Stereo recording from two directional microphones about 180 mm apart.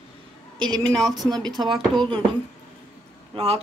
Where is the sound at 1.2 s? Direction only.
20° right (ahead or behind).